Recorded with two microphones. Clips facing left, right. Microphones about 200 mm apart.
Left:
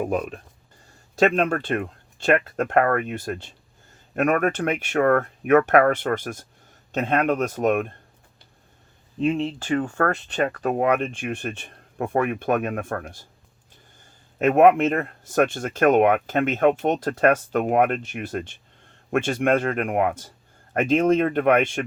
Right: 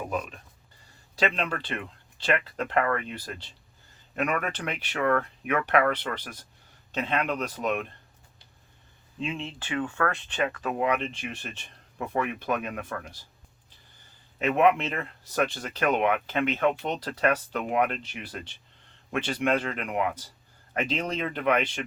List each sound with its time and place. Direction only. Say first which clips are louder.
0.1 s speech: left 7 dB; 55° left (ahead or behind)
9.2 s speech: left 11 dB; 45° left (ahead or behind)
14.3 s speech: left 7 dB; 50° left (ahead or behind)